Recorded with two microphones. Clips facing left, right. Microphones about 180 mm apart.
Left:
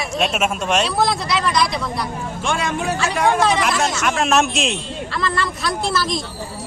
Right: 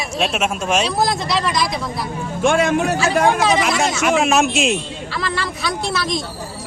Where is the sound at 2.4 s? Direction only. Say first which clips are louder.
Right 7 dB; 50° right (ahead or behind).